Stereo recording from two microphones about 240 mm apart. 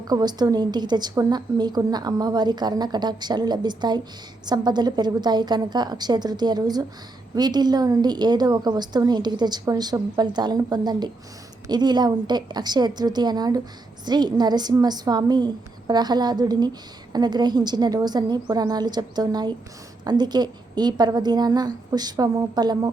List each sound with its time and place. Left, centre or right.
0.0 s a woman's voice: centre